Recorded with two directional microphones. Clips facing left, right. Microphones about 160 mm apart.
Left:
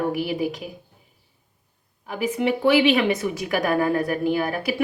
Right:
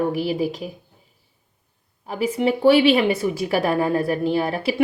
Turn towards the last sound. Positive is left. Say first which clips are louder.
# right 2 dB
turn(degrees=-30)  # may be behind; listen again after turning